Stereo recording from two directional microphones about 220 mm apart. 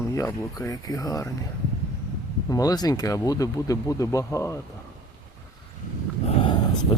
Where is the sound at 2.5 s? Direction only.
15° left (ahead or behind).